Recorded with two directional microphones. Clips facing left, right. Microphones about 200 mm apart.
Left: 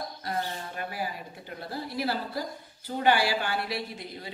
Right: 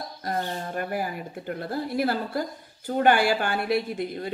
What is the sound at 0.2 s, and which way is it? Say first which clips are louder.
Speech: right 5 dB; 45° right (ahead or behind).